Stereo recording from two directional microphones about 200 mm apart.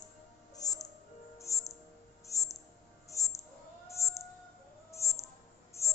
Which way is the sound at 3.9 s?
15° left (ahead or behind).